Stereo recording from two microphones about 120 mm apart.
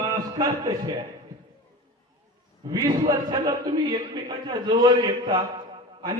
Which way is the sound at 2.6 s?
35° right (ahead or behind).